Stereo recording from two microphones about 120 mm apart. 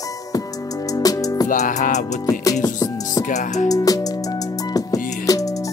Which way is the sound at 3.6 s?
30° left (ahead or behind).